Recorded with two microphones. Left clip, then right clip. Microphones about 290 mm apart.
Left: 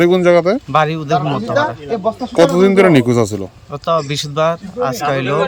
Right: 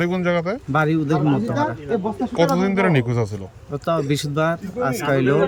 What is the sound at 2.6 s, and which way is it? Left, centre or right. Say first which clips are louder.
Speech: left 10 dB; left.